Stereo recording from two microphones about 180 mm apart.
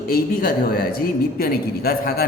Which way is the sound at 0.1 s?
55° left (ahead or behind).